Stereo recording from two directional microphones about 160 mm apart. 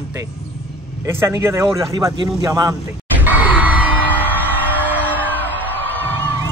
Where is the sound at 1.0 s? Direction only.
15° right (ahead or behind).